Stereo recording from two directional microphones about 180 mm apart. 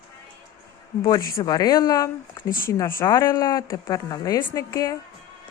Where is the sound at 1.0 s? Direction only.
15° left (ahead or behind).